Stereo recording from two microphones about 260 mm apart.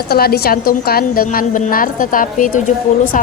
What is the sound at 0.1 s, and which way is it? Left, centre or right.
A woman's voice, left.